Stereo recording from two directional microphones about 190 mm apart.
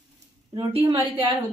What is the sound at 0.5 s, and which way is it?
Speech, 20° right (ahead or behind).